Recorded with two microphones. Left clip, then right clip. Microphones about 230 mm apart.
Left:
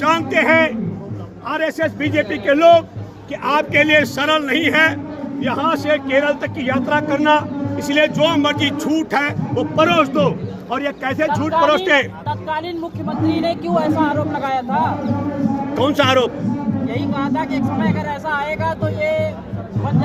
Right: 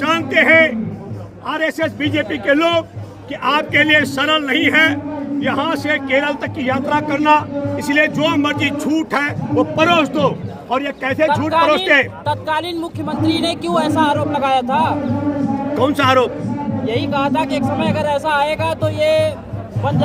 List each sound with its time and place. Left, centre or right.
0.0 s a man's voice: centre
12.2 s speech: right
15.7 s a man's voice: centre
16.8 s speech: right